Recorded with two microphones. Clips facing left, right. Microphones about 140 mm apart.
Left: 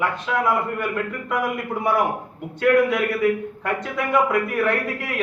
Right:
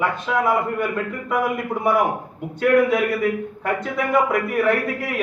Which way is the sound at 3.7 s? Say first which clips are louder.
Right 2 dB; 5° right (ahead or behind).